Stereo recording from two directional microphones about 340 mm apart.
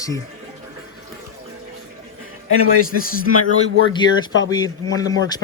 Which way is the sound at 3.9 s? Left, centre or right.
Centre.